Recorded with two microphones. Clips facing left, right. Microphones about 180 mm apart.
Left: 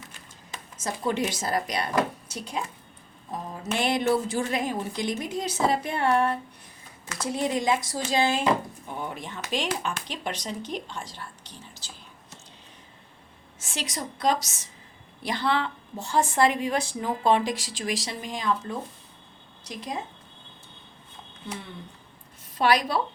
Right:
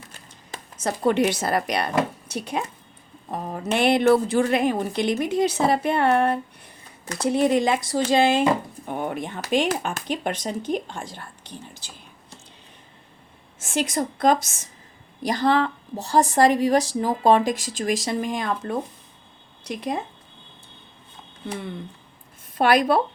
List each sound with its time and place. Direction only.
0.8 s a woman's voice: 65° right (ahead or behind)
13.6 s a woman's voice: 50° right (ahead or behind)
22.5 s a woman's voice: 55° right (ahead or behind)